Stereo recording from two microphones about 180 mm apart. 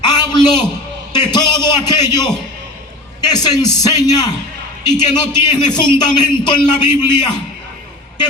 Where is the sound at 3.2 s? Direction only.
20° left (ahead or behind).